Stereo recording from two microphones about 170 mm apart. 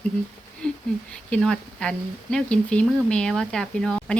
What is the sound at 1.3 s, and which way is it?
Speech, 5° left (ahead or behind).